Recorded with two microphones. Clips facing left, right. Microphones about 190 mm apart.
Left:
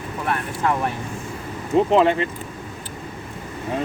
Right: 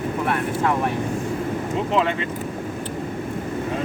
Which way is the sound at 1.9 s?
40° left (ahead or behind).